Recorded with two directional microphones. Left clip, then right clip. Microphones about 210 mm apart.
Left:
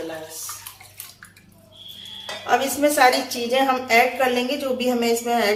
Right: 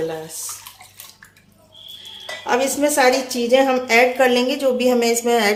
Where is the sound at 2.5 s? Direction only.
40° right (ahead or behind).